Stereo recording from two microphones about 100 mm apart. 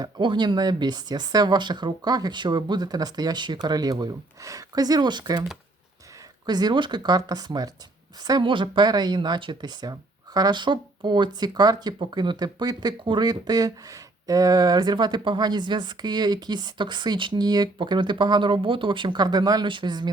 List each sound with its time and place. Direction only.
0.0 s speech: 50° right (ahead or behind)
6.4 s speech: 45° right (ahead or behind)